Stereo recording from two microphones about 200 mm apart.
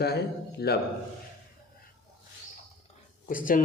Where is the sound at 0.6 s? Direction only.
50° left (ahead or behind).